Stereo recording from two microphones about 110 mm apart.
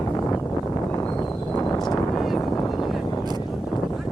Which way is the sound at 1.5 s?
40° left (ahead or behind).